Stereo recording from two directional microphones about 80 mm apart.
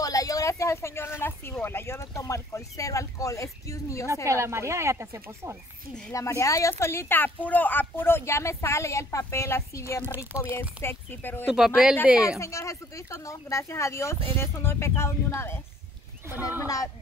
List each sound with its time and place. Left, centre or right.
0.0 s speech: left
4.3 s speech: right
6.1 s speech: left
11.4 s speech: centre
12.4 s speech: left
16.4 s speech: left